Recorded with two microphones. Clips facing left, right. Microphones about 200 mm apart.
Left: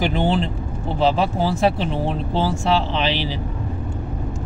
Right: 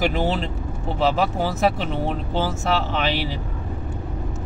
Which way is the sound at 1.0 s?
30° left (ahead or behind).